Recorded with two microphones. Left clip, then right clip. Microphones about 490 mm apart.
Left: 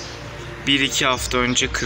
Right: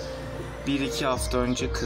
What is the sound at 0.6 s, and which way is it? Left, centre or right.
Speech, right.